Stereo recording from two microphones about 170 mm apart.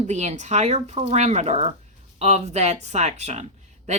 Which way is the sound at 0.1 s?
40° right (ahead or behind).